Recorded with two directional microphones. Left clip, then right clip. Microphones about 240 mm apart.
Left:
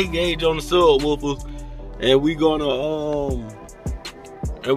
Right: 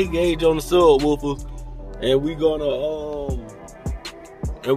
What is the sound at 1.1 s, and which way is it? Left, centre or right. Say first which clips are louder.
Speech: right 1 dB; centre.